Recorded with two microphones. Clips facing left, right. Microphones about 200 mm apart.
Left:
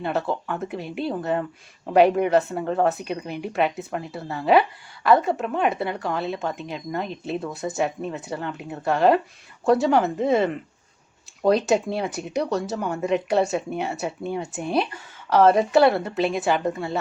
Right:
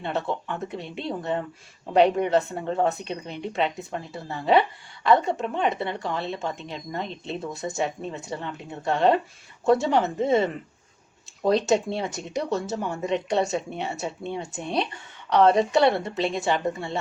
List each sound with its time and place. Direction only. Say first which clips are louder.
0.0 s speech: left 3 dB; centre (ahead or behind)